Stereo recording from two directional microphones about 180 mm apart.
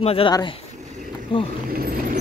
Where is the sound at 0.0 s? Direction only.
30° left (ahead or behind).